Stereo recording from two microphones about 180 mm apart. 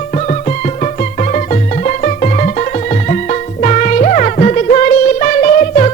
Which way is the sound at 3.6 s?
45° left (ahead or behind).